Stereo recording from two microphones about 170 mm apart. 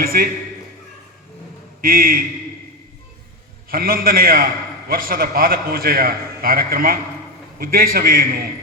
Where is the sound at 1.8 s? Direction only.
60° right (ahead or behind).